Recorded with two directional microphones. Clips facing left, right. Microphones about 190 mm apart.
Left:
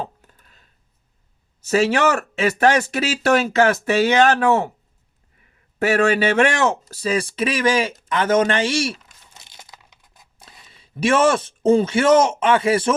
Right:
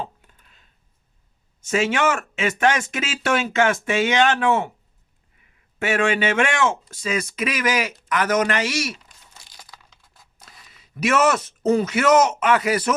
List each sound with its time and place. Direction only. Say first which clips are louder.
0.0 s a sound: left 2 dB; 40° left (ahead or behind)
1.6 s speech: left 3 dB; 35° left (ahead or behind)
5.8 s speech: left 4 dB; 40° left (ahead or behind)
8.1 s crumpling: left 3 dB; 25° left (ahead or behind)